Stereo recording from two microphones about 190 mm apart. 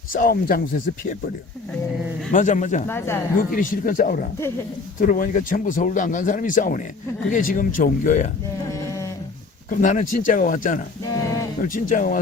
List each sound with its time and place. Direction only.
0.1 s speech: 50° left (ahead or behind)
2.3 s speech: 40° left (ahead or behind)
2.8 s speech: 10° left (ahead or behind)
3.3 s speech: 45° left (ahead or behind)
8.8 s a sound: 15° left (ahead or behind)
9.6 s speech: 45° left (ahead or behind)
11.1 s a sound: 15° left (ahead or behind)
11.6 s speech: 45° left (ahead or behind)